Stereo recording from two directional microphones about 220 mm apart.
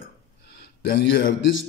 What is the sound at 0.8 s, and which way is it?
Speech, 45° left (ahead or behind).